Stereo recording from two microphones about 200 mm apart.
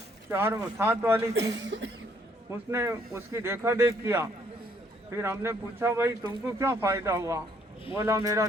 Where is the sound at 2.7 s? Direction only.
15° right (ahead or behind).